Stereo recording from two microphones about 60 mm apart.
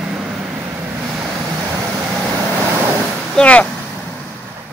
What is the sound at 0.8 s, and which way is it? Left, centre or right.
Waves, right.